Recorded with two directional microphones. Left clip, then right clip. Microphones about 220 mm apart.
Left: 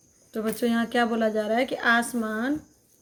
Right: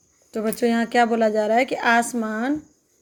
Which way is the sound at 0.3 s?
25° right (ahead or behind).